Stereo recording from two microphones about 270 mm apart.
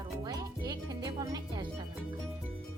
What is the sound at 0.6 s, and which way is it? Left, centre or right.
Music, centre.